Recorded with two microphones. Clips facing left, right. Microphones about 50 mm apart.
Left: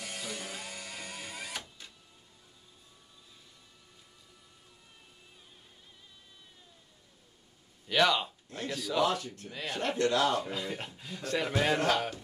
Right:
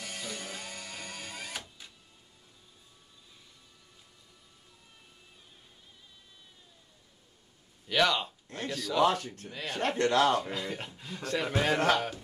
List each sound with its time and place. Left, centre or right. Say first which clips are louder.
0.0 s music: even; centre
7.9 s a sound: even; centre
8.6 s speech: right 1 dB; centre
9.0 s a man's voice: right 6 dB; right
9.5 s speech: even; centre
9.8 s a man's voice: right 2 dB; right
10.5 s a man's voice: right 1 dB; centre